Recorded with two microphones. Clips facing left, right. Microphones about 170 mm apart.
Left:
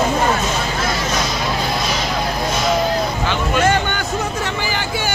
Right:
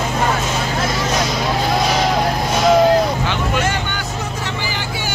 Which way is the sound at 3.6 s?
55° left (ahead or behind).